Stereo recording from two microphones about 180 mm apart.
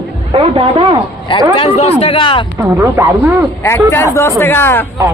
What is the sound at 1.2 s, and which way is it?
Speech, 30° left (ahead or behind).